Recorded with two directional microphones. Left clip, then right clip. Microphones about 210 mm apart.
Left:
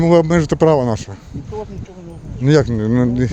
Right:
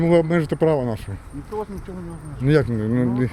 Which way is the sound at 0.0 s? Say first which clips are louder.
Left 5 dB; 25° left (ahead or behind).